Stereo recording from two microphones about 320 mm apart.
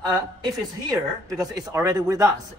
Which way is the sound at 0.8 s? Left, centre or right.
Centre.